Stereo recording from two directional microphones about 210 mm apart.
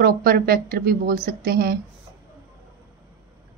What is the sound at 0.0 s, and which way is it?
A woman's voice, 45° right (ahead or behind).